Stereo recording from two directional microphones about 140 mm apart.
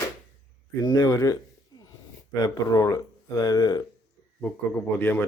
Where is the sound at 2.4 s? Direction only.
25° left (ahead or behind).